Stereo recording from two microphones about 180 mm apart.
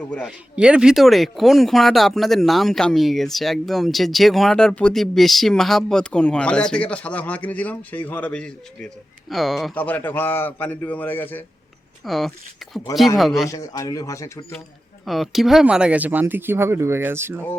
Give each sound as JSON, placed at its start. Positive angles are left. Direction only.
{"t": 0.1, "sound": "a man's voice", "side_deg": 5}
{"t": 12.0, "sound": "speech", "side_deg": 0}
{"t": 13.5, "sound": "speech", "side_deg": 20}
{"t": 15.0, "sound": "speech", "side_deg": 0}